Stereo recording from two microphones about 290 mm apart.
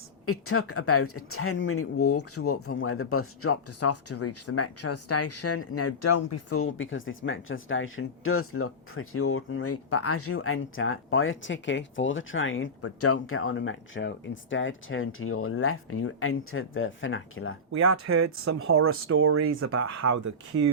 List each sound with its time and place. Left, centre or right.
0.3 s speech: left
17.7 s speech: right
19.8 s speech: right